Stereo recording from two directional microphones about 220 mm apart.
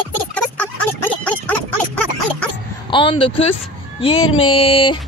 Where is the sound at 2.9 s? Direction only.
25° left (ahead or behind).